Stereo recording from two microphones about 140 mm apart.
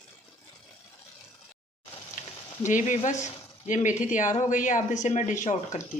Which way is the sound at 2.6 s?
65° left (ahead or behind).